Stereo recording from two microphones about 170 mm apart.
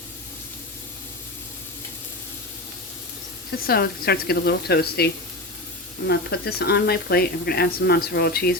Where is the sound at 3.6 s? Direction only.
65° left (ahead or behind).